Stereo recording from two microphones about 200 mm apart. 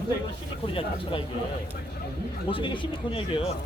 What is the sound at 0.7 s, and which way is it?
Speech, 25° left (ahead or behind).